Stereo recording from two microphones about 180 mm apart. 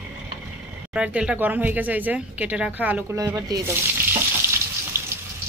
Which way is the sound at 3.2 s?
20° right (ahead or behind).